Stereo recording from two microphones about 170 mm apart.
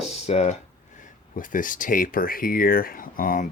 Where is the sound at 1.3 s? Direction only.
50° left (ahead or behind).